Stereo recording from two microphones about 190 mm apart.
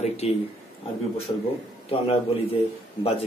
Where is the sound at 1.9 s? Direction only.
30° left (ahead or behind).